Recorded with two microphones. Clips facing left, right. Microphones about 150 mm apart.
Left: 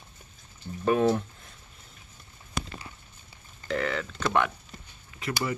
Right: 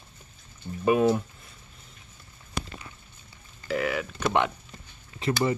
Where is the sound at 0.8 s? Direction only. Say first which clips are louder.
Right 2 dB; 10° right (ahead or behind).